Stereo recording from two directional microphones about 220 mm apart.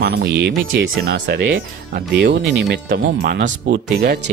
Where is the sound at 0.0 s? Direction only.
45° right (ahead or behind).